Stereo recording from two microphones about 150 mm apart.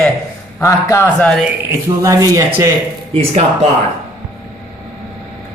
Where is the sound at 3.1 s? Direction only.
45° right (ahead or behind).